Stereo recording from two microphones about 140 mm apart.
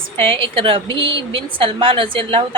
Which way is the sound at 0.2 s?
40° right (ahead or behind).